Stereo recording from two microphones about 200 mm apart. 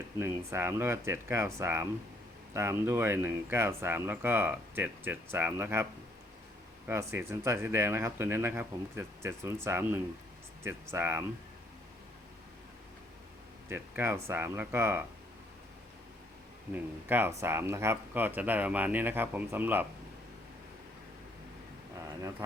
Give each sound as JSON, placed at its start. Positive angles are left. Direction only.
{"t": 0.2, "sound": "speech", "side_deg": -10}
{"t": 6.8, "sound": "speech", "side_deg": -10}
{"t": 13.7, "sound": "speech", "side_deg": -10}
{"t": 16.7, "sound": "speech", "side_deg": -10}
{"t": 22.0, "sound": "speech", "side_deg": -15}